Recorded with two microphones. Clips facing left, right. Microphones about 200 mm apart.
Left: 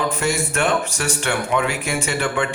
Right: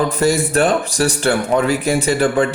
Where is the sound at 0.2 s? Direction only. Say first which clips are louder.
Right 6 dB; 35° right (ahead or behind).